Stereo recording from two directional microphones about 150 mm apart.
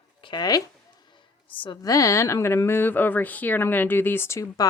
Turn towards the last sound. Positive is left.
turn(degrees=20)  # may be behind; listen again after turning